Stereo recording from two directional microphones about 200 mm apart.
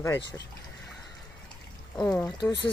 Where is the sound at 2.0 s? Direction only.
5° left (ahead or behind).